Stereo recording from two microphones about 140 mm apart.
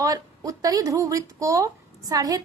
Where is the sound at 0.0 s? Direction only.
25° right (ahead or behind).